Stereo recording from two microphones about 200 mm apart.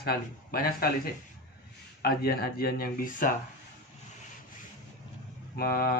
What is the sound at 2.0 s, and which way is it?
Speech, 50° left (ahead or behind).